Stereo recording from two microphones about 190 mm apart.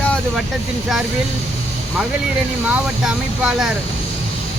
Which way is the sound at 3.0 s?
Centre (ahead or behind).